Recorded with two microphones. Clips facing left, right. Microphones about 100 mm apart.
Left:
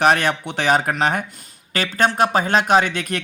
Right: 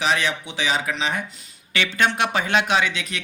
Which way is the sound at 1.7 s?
40° left (ahead or behind).